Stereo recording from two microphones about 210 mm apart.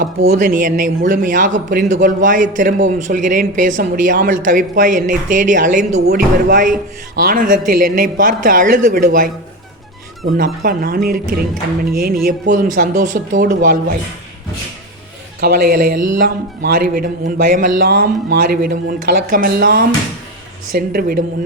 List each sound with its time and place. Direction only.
0.0 s speech: 35° right (ahead or behind)
10.3 s speech: 40° right (ahead or behind)
15.4 s speech: 45° right (ahead or behind)